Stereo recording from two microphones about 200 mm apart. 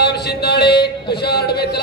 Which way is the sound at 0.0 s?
55° left (ahead or behind).